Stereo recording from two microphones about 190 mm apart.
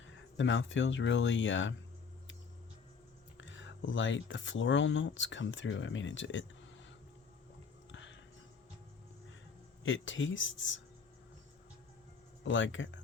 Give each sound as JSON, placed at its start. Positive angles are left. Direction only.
{"t": 0.3, "sound": "speech", "side_deg": 80}
{"t": 3.3, "sound": "speech", "side_deg": 80}
{"t": 7.9, "sound": "a sound", "side_deg": 80}
{"t": 9.8, "sound": "speech", "side_deg": 85}
{"t": 12.5, "sound": "speech", "side_deg": 80}